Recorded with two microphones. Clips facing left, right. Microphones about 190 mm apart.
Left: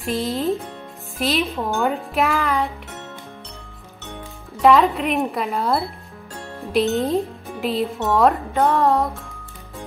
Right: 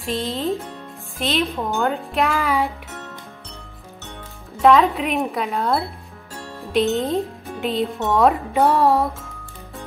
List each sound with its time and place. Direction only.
0.0 s speech: centre (ahead or behind)
4.6 s speech: centre (ahead or behind)